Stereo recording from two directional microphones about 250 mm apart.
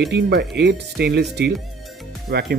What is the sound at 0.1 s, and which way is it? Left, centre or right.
Speech, right.